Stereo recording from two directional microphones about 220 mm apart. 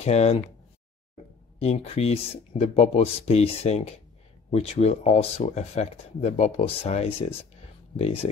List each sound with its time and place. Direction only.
0.0 s speech: 30° left (ahead or behind)
1.6 s speech: 30° left (ahead or behind)